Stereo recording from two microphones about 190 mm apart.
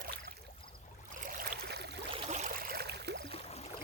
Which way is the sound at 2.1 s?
35° right (ahead or behind).